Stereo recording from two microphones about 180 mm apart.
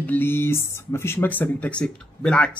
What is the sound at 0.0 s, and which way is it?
Speech, 10° left (ahead or behind).